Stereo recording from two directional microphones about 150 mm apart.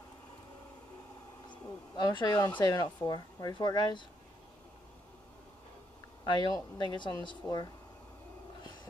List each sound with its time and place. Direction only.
1.5 s speech: 30° left (ahead or behind)
6.2 s speech: 30° left (ahead or behind)